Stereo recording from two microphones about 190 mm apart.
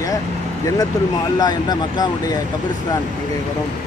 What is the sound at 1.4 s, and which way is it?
Speech, 20° left (ahead or behind).